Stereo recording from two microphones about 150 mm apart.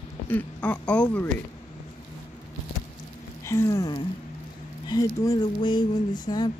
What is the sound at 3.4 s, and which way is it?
Speech, 20° left (ahead or behind).